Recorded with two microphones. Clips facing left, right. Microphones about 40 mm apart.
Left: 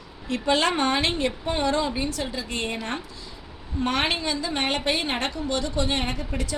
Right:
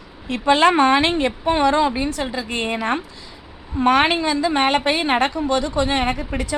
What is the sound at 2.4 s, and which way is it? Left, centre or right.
Speech, right.